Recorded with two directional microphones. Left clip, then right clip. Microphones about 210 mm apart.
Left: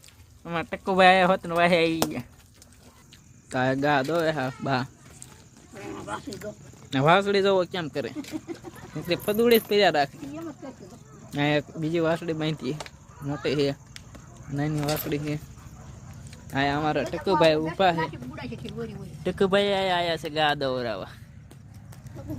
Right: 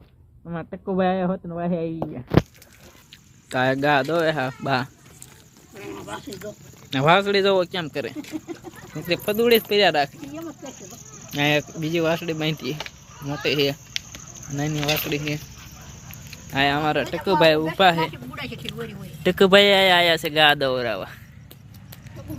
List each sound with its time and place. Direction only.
0.4 s speech: 10° left (ahead or behind)
3.5 s speech: centre (ahead or behind)
5.8 s a sound: 15° left (ahead or behind)
6.9 s speech: 5° left (ahead or behind)
8.2 s speech: 20° right (ahead or behind)
9.0 s speech: centre (ahead or behind)
11.3 s speech: 5° left (ahead or behind)
16.5 s speech: centre (ahead or behind)
18.1 s speech: 35° left (ahead or behind)
18.6 s speech: 10° right (ahead or behind)